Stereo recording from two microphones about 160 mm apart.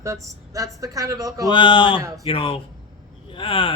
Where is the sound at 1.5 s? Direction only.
30° left (ahead or behind).